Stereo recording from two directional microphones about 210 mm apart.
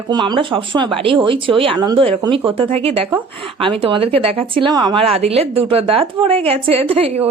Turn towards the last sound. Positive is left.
turn(degrees=-30)  # may be behind; listen again after turning